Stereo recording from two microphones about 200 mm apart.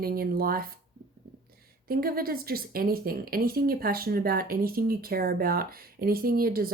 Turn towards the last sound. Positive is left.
turn(degrees=-50)  # may be behind; listen again after turning